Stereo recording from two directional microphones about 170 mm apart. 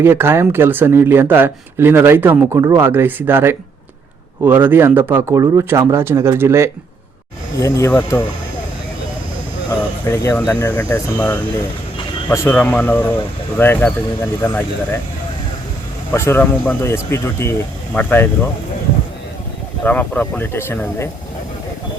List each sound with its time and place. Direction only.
0.0 s speech: 15° right (ahead or behind)
7.6 s speech: 15° left (ahead or behind)
10.1 s speech: 15° left (ahead or behind)
16.1 s speech: 15° left (ahead or behind)
19.8 s speech: 10° left (ahead or behind)